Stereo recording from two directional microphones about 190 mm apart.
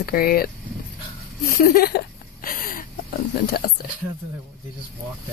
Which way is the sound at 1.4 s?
50° left (ahead or behind).